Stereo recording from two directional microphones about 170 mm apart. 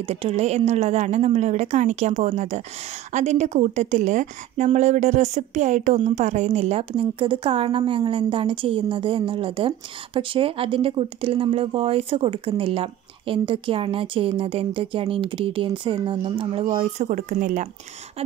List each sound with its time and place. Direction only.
0.0 s a woman's voice: 35° right (ahead or behind)